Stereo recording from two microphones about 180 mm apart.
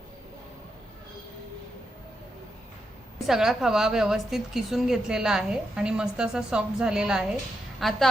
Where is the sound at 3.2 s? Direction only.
Centre (ahead or behind).